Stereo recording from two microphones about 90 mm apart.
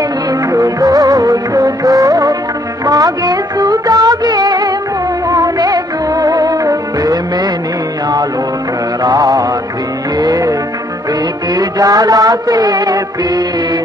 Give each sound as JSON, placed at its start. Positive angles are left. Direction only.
{"t": 0.3, "sound": "music of bollywood", "side_deg": -40}
{"t": 9.0, "sound": "mantra", "side_deg": -45}
{"t": 10.1, "sound": "music", "side_deg": -50}
{"t": 11.5, "sound": "music", "side_deg": -45}